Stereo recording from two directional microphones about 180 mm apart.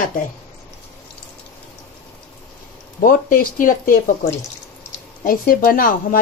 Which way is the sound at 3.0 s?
50° left (ahead or behind).